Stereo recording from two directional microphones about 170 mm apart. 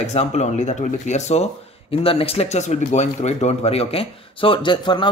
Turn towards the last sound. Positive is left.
turn(degrees=30)  # may be behind; listen again after turning